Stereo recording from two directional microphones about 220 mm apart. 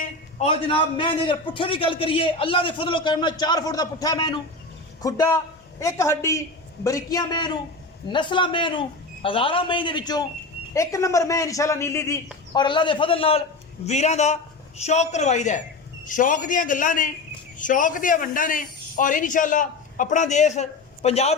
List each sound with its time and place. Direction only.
0.0 s a man's voice: 30° left (ahead or behind)